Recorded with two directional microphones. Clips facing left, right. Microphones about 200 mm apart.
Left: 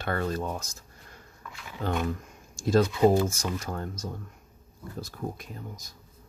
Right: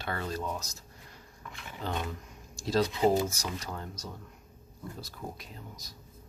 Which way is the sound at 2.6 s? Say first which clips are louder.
Left 5 dB; 50° left (ahead or behind).